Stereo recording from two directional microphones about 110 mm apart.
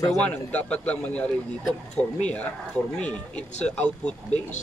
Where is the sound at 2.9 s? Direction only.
10° left (ahead or behind).